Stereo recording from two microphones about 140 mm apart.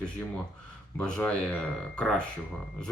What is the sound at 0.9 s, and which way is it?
Speech, 10° left (ahead or behind).